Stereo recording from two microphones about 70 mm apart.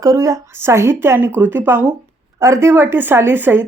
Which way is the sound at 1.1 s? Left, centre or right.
Right.